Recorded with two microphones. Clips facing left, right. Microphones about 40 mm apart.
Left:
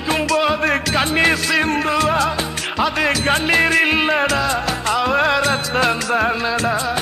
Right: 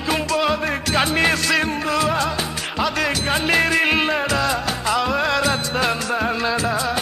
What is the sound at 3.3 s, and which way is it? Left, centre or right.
Music of bollywood, centre.